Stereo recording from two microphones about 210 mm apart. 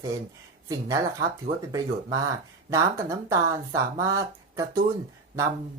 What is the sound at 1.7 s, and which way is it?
Speech, 15° right (ahead or behind).